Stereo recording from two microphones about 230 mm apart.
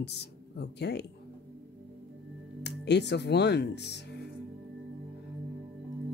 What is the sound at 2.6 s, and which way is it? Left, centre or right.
Speech, left.